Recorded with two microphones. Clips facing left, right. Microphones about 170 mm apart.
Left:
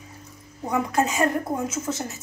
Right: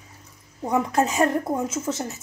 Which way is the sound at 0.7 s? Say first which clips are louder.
Right 1 dB; centre (ahead or behind).